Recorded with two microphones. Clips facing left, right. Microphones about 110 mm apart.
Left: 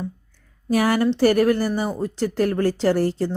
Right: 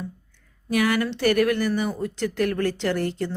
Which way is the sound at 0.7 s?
35° left (ahead or behind).